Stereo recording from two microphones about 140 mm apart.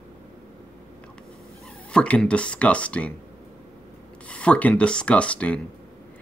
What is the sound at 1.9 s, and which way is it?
Speech, 10° left (ahead or behind).